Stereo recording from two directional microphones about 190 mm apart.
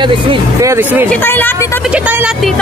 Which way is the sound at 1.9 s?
5° right (ahead or behind).